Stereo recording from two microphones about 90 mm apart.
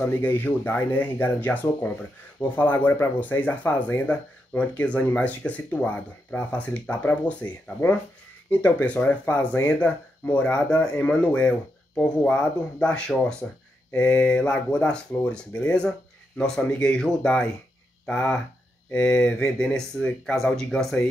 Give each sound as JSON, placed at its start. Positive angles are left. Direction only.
{"t": 0.0, "sound": "speech", "side_deg": 20}